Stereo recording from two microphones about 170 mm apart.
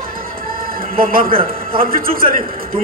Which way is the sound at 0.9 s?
55° right (ahead or behind).